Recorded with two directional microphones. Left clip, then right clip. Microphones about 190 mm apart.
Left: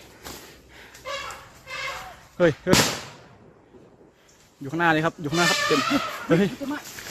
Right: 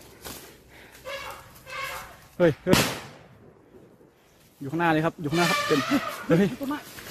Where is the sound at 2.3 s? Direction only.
5° right (ahead or behind).